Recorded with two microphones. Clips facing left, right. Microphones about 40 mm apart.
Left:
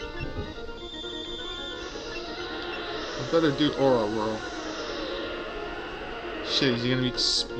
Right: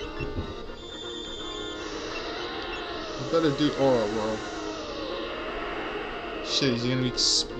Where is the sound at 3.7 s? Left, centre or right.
Right.